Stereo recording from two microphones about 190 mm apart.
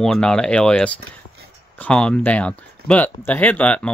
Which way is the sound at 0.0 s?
5° left (ahead or behind).